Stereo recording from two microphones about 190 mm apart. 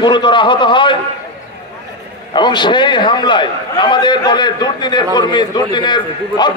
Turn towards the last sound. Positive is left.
turn(degrees=25)  # may be behind; listen again after turning